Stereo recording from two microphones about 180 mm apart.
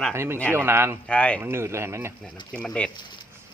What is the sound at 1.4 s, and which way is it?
Speech, 15° right (ahead or behind).